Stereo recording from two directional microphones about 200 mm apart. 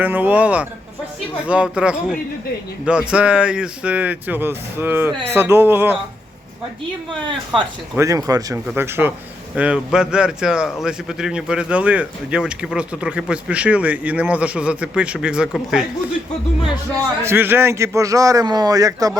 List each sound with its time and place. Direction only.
0.0 s a man's voice: 10° right (ahead or behind)
7.9 s a man's voice: 15° right (ahead or behind)
17.2 s speech: 10° right (ahead or behind)